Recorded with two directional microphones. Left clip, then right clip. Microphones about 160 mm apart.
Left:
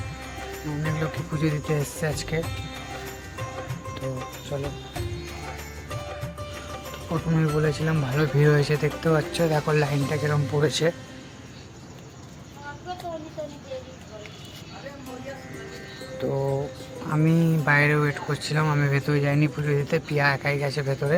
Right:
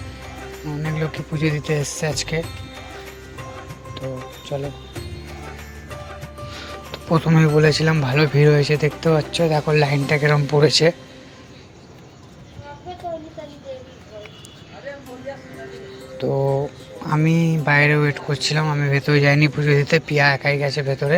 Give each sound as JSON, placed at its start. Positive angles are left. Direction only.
{"t": 0.9, "sound": "speech", "side_deg": -15}
{"t": 4.5, "sound": "speech", "side_deg": -10}
{"t": 7.1, "sound": "speech", "side_deg": -35}
{"t": 9.8, "sound": "speech", "side_deg": -30}
{"t": 16.1, "sound": "music", "side_deg": -20}
{"t": 17.2, "sound": "speech", "side_deg": -20}